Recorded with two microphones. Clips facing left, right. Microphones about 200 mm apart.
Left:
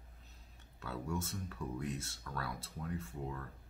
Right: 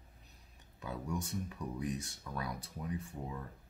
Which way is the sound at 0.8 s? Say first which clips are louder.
Right 1 dB; 15° right (ahead or behind).